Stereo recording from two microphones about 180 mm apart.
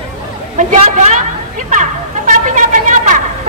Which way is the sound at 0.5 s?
45° right (ahead or behind).